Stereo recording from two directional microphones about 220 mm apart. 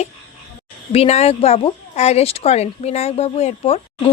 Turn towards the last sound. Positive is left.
turn(degrees=25)  # may be behind; listen again after turning